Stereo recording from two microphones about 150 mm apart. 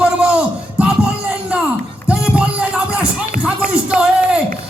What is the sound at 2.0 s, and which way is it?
Music, 5° right (ahead or behind).